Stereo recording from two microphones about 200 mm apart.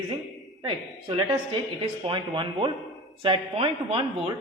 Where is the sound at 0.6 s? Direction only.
25° right (ahead or behind).